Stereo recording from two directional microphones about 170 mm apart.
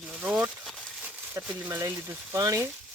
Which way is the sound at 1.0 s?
10° right (ahead or behind).